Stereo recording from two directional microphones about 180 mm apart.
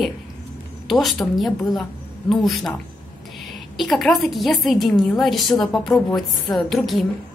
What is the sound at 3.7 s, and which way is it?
Speech, centre (ahead or behind).